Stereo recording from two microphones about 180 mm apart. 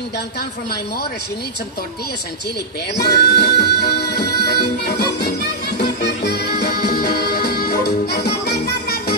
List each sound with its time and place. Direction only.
3.0 s music: 65° left (ahead or behind)